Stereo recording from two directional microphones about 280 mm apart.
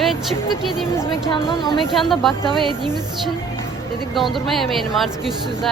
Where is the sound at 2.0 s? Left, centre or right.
Centre.